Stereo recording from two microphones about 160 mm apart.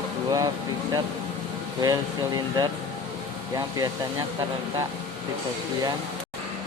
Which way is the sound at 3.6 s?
20° right (ahead or behind).